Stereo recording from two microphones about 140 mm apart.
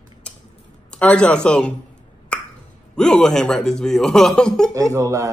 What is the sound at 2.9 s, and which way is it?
Speech, 5° left (ahead or behind).